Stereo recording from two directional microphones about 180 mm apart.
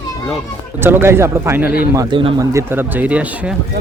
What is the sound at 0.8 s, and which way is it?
Speech, 10° right (ahead or behind).